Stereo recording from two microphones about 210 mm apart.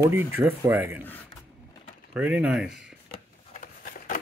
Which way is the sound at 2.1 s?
5° right (ahead or behind).